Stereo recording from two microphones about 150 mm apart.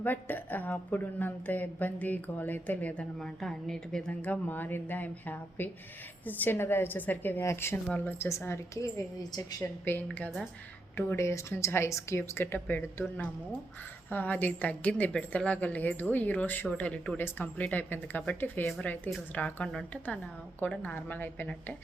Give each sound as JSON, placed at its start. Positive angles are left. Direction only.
{"t": 0.0, "sound": "a woman's voice", "side_deg": 10}
{"t": 9.8, "sound": "a woman's voice", "side_deg": 10}